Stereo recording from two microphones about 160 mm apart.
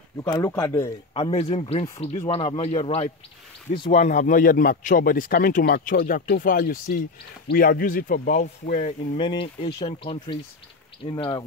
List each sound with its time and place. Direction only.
0.2 s speech: 20° left (ahead or behind)
1.1 s a man's voice: 40° left (ahead or behind)
3.9 s speech: 50° left (ahead or behind)
9.2 s a man's voice: 30° left (ahead or behind)